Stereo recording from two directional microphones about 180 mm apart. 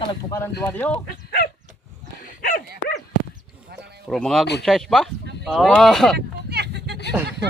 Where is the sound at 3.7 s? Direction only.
65° right (ahead or behind).